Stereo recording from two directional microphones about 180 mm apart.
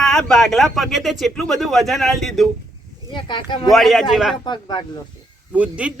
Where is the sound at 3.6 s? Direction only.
Centre (ahead or behind).